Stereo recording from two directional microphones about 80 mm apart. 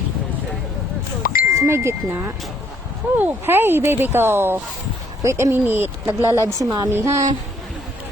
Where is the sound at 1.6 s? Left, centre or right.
Right.